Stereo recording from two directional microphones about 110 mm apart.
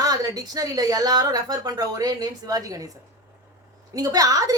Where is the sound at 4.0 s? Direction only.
35° right (ahead or behind).